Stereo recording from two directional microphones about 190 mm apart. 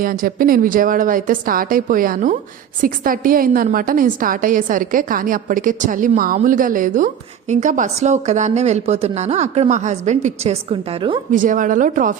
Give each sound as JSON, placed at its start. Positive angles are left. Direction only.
{"t": 0.0, "sound": "a woman's voice", "side_deg": -45}
{"t": 11.3, "sound": "a woman's voice", "side_deg": -45}